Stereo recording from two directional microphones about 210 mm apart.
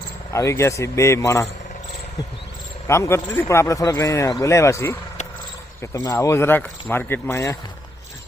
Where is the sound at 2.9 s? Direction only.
15° left (ahead or behind).